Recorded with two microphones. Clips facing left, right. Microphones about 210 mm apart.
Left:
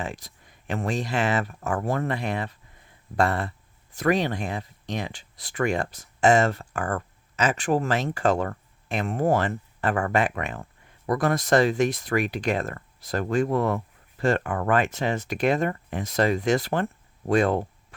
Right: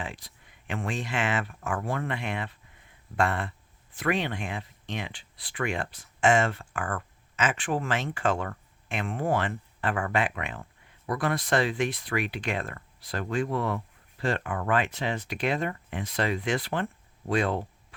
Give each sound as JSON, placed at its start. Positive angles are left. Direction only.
{"t": 0.0, "sound": "speech", "side_deg": 45}